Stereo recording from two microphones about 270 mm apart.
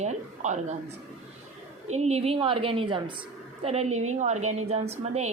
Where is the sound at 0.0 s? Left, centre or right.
Right.